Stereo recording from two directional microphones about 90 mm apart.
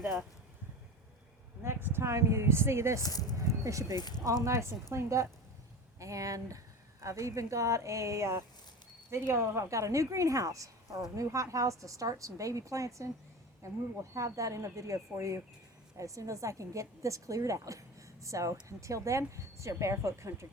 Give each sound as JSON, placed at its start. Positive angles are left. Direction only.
{"t": 1.6, "sound": "speech", "side_deg": -25}
{"t": 3.0, "sound": "speech", "side_deg": 45}
{"t": 3.6, "sound": "a woman's voice", "side_deg": -35}
{"t": 3.9, "sound": "speech", "side_deg": 50}
{"t": 4.4, "sound": "a woman's voice", "side_deg": -30}